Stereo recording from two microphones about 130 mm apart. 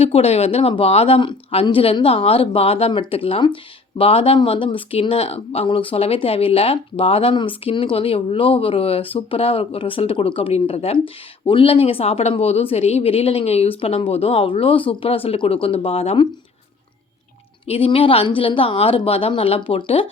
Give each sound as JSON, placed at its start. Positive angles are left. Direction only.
{"t": 0.0, "sound": "speech", "side_deg": 50}
{"t": 17.7, "sound": "speech", "side_deg": 45}